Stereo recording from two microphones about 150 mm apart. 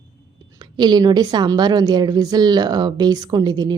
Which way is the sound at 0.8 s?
30° right (ahead or behind).